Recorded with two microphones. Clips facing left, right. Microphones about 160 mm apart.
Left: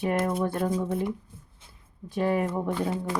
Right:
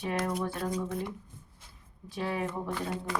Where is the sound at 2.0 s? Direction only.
50° left (ahead or behind).